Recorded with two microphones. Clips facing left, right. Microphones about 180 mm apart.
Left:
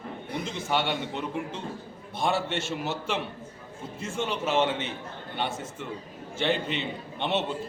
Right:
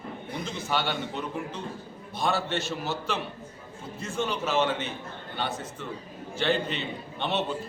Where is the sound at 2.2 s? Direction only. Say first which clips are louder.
Even; 25° left (ahead or behind).